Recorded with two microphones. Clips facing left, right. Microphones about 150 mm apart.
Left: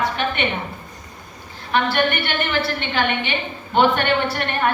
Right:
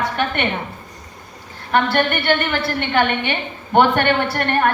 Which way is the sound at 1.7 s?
50° right (ahead or behind).